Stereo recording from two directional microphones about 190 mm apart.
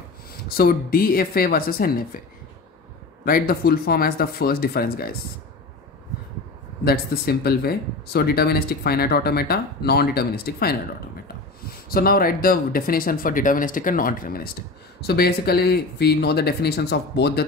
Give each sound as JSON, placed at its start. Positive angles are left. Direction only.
{"t": 0.5, "sound": "speech", "side_deg": 50}
{"t": 3.3, "sound": "speech", "side_deg": 50}
{"t": 6.8, "sound": "speech", "side_deg": 55}